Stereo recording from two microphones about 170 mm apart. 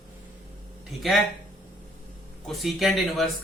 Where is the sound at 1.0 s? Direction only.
Centre (ahead or behind).